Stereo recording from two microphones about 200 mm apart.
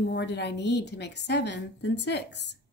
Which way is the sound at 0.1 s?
60° left (ahead or behind).